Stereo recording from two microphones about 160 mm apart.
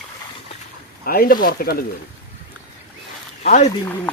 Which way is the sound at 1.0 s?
65° left (ahead or behind).